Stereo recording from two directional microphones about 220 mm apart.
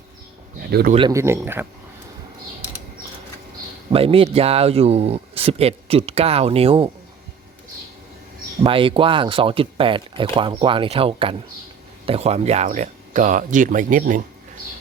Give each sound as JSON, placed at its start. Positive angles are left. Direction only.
{"t": 0.7, "sound": "speech", "side_deg": -45}
{"t": 0.9, "sound": "speech", "side_deg": -15}
{"t": 3.9, "sound": "speech", "side_deg": -25}
{"t": 8.6, "sound": "speech", "side_deg": -25}